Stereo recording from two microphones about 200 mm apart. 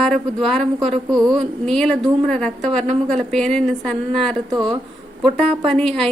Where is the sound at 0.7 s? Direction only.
30° right (ahead or behind).